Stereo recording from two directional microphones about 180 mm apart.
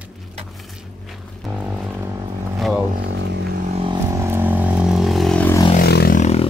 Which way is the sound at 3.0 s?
75° right (ahead or behind).